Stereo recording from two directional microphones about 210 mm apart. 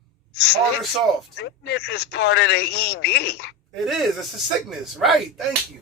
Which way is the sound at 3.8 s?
Centre (ahead or behind).